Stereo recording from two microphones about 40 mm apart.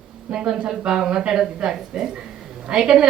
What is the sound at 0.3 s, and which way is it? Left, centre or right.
A woman's voice, right.